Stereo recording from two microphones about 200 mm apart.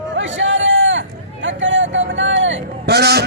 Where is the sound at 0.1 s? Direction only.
65° right (ahead or behind).